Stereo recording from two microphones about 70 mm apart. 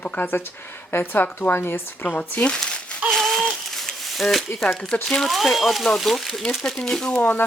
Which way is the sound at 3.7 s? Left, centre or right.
Centre.